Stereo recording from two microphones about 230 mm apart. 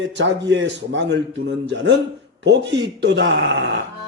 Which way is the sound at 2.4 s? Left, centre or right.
Right.